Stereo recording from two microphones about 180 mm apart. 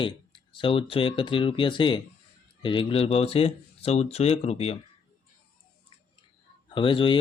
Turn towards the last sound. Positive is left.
turn(degrees=30)  # may be behind; listen again after turning